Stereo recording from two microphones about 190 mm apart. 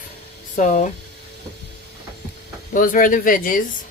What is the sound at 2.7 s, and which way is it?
Speech, 45° left (ahead or behind).